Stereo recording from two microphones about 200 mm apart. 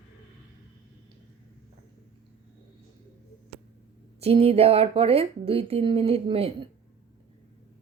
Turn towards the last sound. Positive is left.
turn(degrees=-30)  # may be behind; listen again after turning